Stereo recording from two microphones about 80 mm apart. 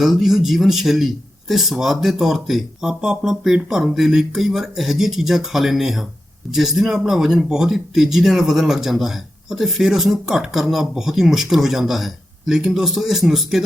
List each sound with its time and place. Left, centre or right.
0.0 s speech: centre